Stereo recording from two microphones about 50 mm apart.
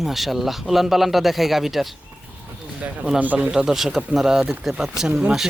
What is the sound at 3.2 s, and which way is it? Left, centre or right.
Speech, right.